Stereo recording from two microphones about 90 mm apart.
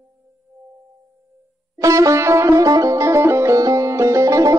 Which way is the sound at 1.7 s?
35° right (ahead or behind).